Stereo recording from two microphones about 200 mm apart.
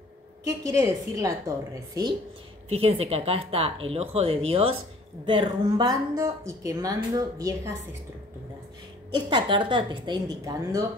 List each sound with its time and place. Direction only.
0.5 s a woman's voice: 10° right (ahead or behind)
2.7 s a woman's voice: 30° right (ahead or behind)
9.1 s speech: 25° right (ahead or behind)